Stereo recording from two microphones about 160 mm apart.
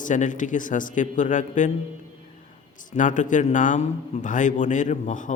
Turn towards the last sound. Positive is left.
turn(degrees=50)  # may be behind; listen again after turning